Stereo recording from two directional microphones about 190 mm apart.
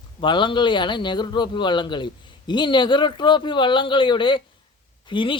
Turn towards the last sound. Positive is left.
turn(degrees=25)  # may be behind; listen again after turning